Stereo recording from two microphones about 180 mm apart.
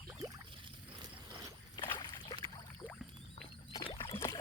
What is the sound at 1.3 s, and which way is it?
Boat, 20° right (ahead or behind).